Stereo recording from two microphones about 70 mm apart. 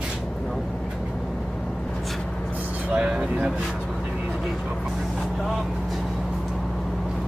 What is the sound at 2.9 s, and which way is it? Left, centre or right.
Vehicle, centre.